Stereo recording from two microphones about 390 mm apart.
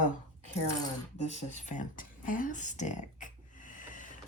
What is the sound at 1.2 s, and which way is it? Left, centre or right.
Speech, centre.